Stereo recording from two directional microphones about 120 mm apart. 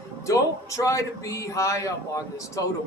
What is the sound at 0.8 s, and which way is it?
Speech, 25° left (ahead or behind).